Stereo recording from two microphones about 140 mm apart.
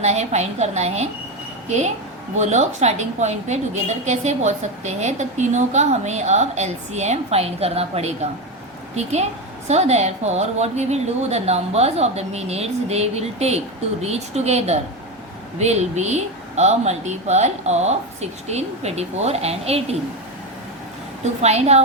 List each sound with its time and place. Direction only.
0.0 s a woman's voice: 50° right (ahead or behind)
21.4 s speech: 50° right (ahead or behind)